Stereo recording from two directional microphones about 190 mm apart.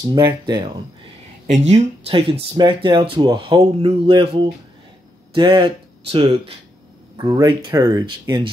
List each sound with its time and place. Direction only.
0.0 s speech: 20° right (ahead or behind)
1.7 s speech: 30° right (ahead or behind)